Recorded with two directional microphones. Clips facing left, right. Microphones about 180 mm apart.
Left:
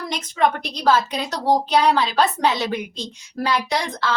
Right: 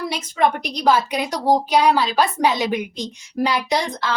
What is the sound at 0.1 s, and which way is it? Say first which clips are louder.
A woman's voice: left 1 dB; 10° right (ahead or behind).